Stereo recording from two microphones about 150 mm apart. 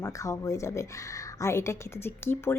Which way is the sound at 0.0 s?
20° left (ahead or behind).